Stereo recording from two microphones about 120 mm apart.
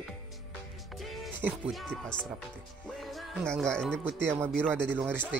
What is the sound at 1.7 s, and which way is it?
Speech, 5° left (ahead or behind).